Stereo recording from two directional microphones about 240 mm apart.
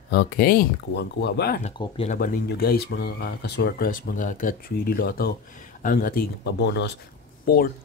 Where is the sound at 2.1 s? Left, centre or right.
Left.